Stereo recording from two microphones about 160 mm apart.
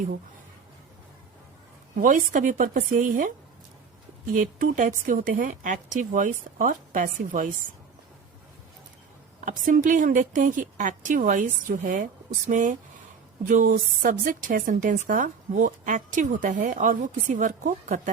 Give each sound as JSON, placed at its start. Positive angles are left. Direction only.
{"t": 2.0, "sound": "speech", "side_deg": -55}
{"t": 9.4, "sound": "a woman's voice", "side_deg": -55}